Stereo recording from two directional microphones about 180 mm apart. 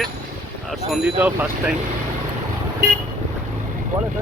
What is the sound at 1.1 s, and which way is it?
Speech, 10° right (ahead or behind).